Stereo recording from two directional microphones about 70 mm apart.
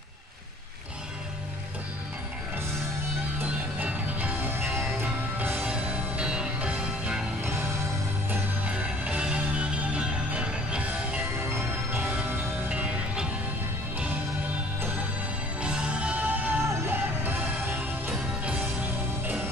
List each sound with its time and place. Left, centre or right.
3.3 s music: right
4.6 s music: centre
5.0 s music: right
5.6 s music: centre
8.6 s music: centre
11.3 s music: right
12.6 s music: centre
15.6 s music: centre
16.6 s music: right
16.9 s music: right